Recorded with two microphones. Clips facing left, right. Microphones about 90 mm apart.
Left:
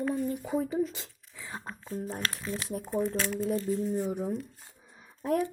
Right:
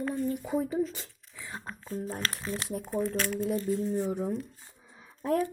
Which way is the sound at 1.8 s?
15° left (ahead or behind).